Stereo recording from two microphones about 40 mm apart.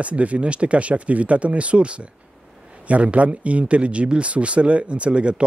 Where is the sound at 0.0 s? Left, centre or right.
Right.